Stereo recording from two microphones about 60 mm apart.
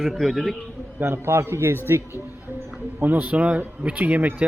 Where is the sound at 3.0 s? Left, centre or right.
Right.